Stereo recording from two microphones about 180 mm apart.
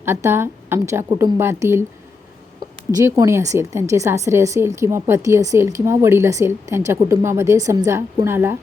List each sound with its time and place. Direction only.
0.0 s a woman's voice: 15° right (ahead or behind)
2.9 s a woman's voice: 15° right (ahead or behind)